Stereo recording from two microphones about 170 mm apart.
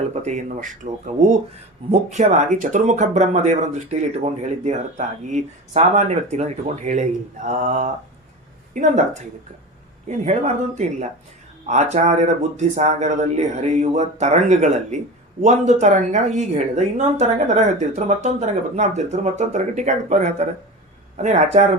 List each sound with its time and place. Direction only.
0.1 s speech: 40° right (ahead or behind)
10.1 s speech: 45° right (ahead or behind)